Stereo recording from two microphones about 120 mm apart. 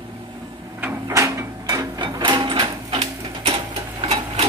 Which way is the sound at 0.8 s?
20° right (ahead or behind).